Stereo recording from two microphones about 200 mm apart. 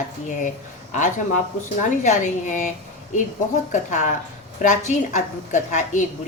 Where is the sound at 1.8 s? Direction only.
35° left (ahead or behind).